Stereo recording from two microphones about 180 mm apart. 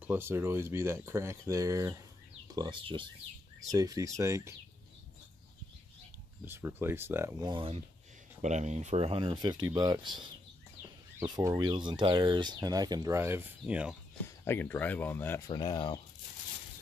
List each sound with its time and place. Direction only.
0.0 s speech: 10° right (ahead or behind)
6.4 s speech: 10° right (ahead or behind); by 7.8 s 30° right (ahead or behind)
8.4 s speech: 40° right (ahead or behind); by 13.9 s 5° right (ahead or behind)
14.4 s speech: 10° left (ahead or behind)